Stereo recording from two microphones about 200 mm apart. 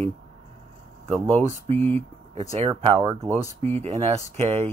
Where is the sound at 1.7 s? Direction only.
30° right (ahead or behind).